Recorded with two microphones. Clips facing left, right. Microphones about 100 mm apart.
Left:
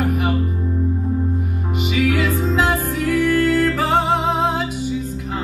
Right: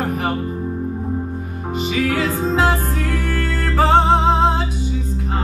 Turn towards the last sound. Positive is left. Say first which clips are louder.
# right 3 dB
turn(degrees=-30)  # may be behind; listen again after turning